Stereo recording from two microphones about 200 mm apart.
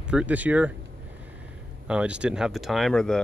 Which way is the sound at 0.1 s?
5° right (ahead or behind).